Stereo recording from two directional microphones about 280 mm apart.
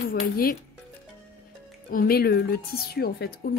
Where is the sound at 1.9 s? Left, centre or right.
Left.